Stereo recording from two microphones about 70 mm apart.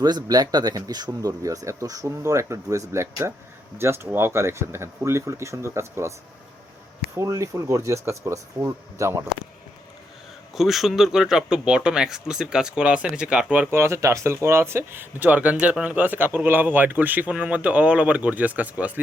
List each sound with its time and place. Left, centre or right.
0.0 s speech: right
7.2 s speech: right
10.5 s speech: centre
13.7 s speech: right